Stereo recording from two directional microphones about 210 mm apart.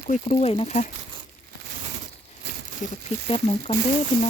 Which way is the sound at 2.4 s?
55° right (ahead or behind).